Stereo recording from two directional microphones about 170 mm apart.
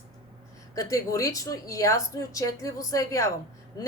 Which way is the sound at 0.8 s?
20° left (ahead or behind).